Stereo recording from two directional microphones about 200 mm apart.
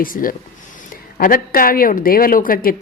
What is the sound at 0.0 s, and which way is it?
A woman's voice, 45° left (ahead or behind).